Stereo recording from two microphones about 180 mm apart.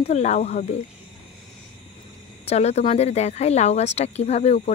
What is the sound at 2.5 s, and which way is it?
A woman's voice, 35° left (ahead or behind).